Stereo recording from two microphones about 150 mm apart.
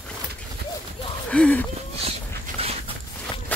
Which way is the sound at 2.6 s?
40° right (ahead or behind).